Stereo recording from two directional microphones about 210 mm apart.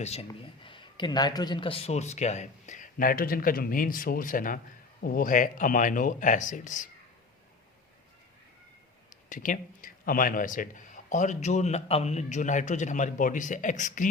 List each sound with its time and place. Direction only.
0.0 s a man's voice: 30° left (ahead or behind)
9.3 s a man's voice: 40° left (ahead or behind)